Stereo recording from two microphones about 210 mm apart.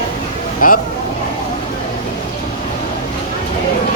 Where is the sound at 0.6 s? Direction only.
40° left (ahead or behind).